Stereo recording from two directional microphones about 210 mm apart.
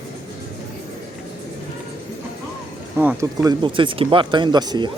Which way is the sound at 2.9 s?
10° right (ahead or behind).